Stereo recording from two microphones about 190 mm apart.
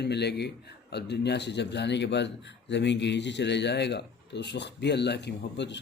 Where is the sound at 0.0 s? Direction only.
60° left (ahead or behind).